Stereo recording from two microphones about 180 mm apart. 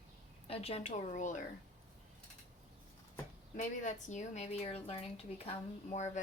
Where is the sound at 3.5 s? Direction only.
45° left (ahead or behind).